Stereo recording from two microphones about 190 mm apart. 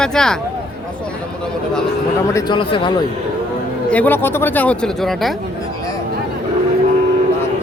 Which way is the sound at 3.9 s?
10° left (ahead or behind).